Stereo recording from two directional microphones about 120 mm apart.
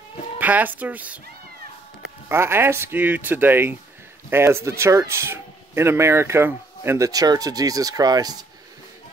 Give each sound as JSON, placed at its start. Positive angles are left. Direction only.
{"t": 0.4, "sound": "speech", "side_deg": -15}
{"t": 2.2, "sound": "speech", "side_deg": -20}
{"t": 7.1, "sound": "speech", "side_deg": -30}